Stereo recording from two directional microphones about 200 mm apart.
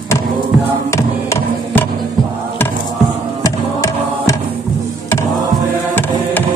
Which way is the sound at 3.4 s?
15° left (ahead or behind).